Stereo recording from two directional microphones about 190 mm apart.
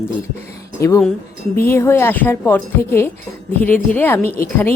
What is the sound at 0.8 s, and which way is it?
A woman's voice, 15° left (ahead or behind).